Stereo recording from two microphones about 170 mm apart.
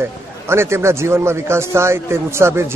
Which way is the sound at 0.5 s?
15° right (ahead or behind).